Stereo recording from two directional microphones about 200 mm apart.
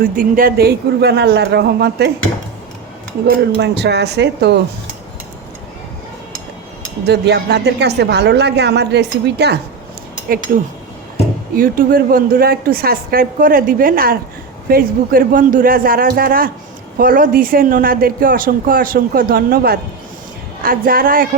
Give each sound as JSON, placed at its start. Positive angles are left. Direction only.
{"t": 0.0, "sound": "a woman's voice", "side_deg": -45}
{"t": 3.6, "sound": "a woman's voice", "side_deg": -60}
{"t": 7.0, "sound": "a woman's voice", "side_deg": -55}
{"t": 11.5, "sound": "speech", "side_deg": -45}